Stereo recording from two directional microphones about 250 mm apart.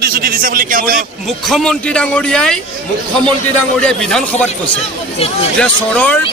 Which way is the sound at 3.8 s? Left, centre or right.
Centre.